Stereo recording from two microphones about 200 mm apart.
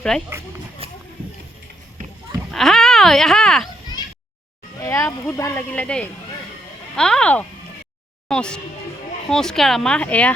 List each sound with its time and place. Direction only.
0.1 s speech: 5° left (ahead or behind)
0.8 s a sound: 30° right (ahead or behind)
2.5 s speech: centre (ahead or behind)
4.8 s speech: 15° left (ahead or behind)